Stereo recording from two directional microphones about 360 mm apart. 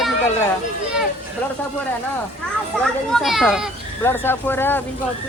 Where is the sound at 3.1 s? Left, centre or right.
Centre.